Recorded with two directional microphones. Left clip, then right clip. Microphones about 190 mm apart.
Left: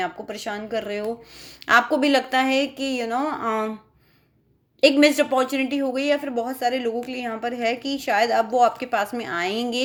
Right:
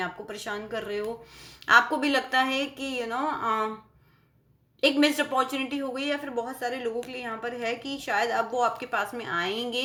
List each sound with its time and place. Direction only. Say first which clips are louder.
0.0 s a woman's voice: left 5 dB; 35° left (ahead or behind)
4.8 s a woman's voice: left 7 dB; 35° left (ahead or behind)